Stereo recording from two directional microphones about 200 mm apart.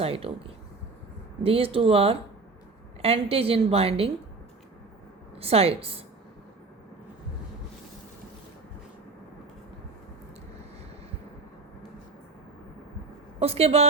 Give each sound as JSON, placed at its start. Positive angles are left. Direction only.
{"t": 0.0, "sound": "a woman's voice", "side_deg": -30}
{"t": 5.4, "sound": "a woman's voice", "side_deg": -30}
{"t": 13.4, "sound": "a woman's voice", "side_deg": -30}